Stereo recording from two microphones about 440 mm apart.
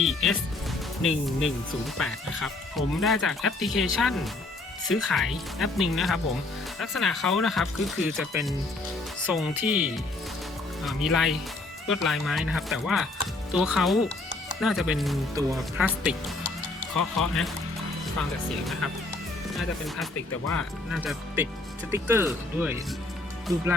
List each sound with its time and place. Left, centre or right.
0.0 s speech: centre
16.9 s speech: left
18.2 s speech: centre